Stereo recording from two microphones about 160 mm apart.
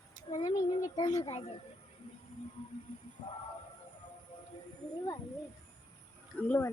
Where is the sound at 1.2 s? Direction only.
40° left (ahead or behind).